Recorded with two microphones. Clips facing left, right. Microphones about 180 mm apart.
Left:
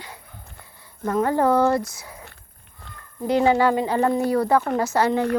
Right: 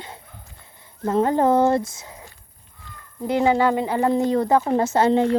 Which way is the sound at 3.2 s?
20° right (ahead or behind).